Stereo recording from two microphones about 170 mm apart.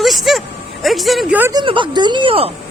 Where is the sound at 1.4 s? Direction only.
15° right (ahead or behind).